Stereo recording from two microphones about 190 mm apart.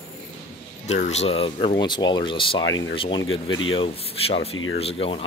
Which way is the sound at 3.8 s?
30° left (ahead or behind).